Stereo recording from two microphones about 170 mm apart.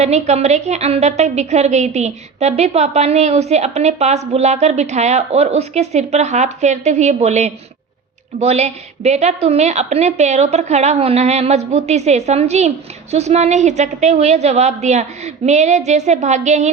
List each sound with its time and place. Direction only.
0.0 s a woman's voice: 40° right (ahead or behind)